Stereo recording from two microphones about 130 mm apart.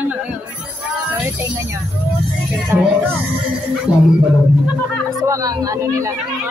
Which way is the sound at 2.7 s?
20° right (ahead or behind).